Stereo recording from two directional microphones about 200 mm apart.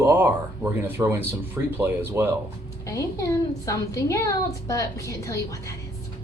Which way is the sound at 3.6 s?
15° left (ahead or behind).